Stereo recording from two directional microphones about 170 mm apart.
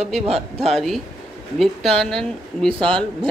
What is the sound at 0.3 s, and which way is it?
Speech, 35° right (ahead or behind).